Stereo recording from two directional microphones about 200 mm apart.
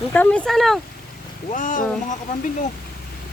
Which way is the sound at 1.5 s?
40° left (ahead or behind).